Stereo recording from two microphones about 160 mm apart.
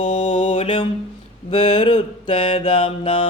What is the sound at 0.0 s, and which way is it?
Mantra, 35° left (ahead or behind).